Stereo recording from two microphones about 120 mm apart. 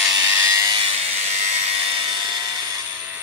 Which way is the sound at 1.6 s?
45° right (ahead or behind).